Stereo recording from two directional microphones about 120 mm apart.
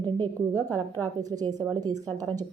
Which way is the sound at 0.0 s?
15° left (ahead or behind).